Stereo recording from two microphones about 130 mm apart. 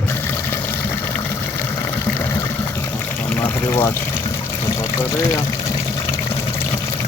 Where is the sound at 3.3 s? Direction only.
15° left (ahead or behind).